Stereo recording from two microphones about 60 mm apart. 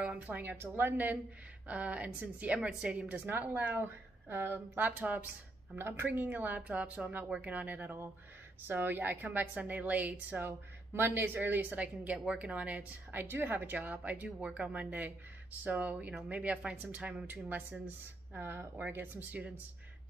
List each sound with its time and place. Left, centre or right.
0.0 s a woman's voice: right
5.8 s a woman's voice: right
6.0 s a woman's voice: right
10.4 s a woman's voice: right
11.8 s a woman's voice: right
13.2 s a woman's voice: right